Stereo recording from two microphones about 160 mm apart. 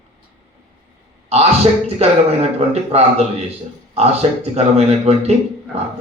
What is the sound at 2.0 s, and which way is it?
A man's voice, 40° right (ahead or behind).